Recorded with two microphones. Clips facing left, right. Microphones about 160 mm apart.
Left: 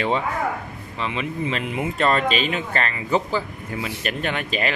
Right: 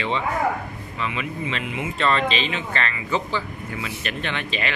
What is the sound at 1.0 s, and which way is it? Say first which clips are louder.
Speech: left 2 dB; 35° left (ahead or behind).